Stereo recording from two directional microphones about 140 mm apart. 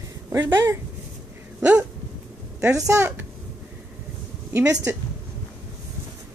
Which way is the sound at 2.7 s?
20° right (ahead or behind).